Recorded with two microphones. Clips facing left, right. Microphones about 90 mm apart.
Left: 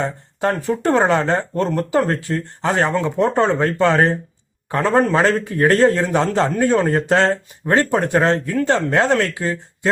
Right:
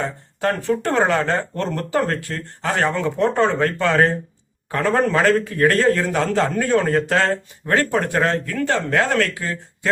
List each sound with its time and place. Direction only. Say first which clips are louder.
0.0 s speech: left 2 dB; 20° left (ahead or behind)